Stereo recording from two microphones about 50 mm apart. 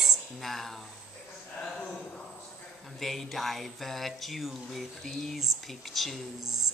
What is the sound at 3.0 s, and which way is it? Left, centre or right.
Speech, centre.